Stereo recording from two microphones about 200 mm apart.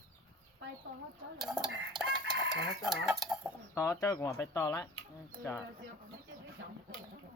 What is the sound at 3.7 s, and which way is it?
Speech, 15° left (ahead or behind).